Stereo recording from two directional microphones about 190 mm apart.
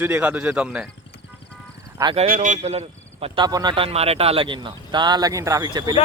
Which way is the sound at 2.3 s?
40° right (ahead or behind).